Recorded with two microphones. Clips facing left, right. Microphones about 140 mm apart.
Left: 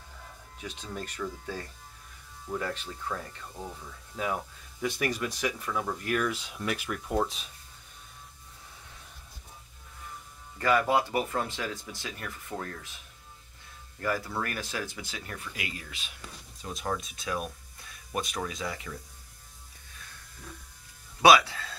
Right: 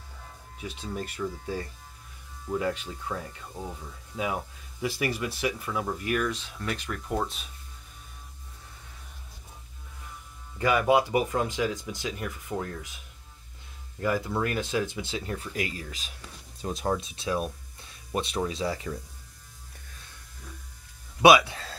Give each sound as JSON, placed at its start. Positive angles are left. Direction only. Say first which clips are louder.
{"t": 0.6, "sound": "speech", "louder": "right 3 dB", "side_deg": -5}
{"t": 4.8, "sound": "speech", "louder": "right 1 dB", "side_deg": -5}
{"t": 6.3, "sound": "speech", "louder": "left 1 dB", "side_deg": 10}
{"t": 10.6, "sound": "speech", "louder": "right 3 dB", "side_deg": -15}
{"t": 14.0, "sound": "speech", "louder": "right 4 dB", "side_deg": -20}
{"t": 15.5, "sound": "speech", "louder": "right 7 dB", "side_deg": -40}
{"t": 21.2, "sound": "speech", "louder": "right 2 dB", "side_deg": -20}